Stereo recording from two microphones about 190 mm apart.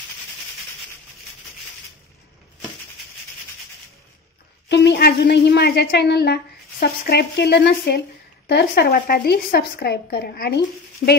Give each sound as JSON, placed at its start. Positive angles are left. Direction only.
{"t": 4.6, "sound": "a woman's voice", "side_deg": 65}